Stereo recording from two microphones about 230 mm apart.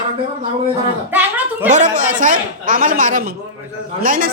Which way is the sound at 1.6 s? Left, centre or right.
Right.